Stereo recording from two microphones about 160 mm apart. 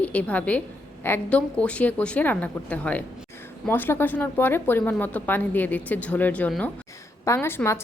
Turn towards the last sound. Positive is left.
turn(degrees=15)  # may be behind; listen again after turning